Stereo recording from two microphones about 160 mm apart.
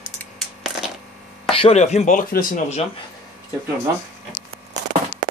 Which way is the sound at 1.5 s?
40° left (ahead or behind).